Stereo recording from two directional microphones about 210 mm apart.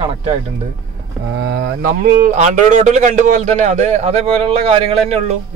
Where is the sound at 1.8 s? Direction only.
40° right (ahead or behind).